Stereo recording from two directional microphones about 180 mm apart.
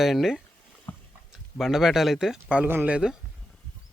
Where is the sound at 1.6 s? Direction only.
Centre (ahead or behind).